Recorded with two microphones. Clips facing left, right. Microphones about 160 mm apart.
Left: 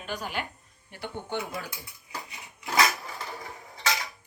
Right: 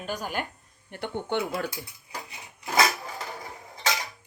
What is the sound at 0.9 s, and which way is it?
Speech, 60° right (ahead or behind).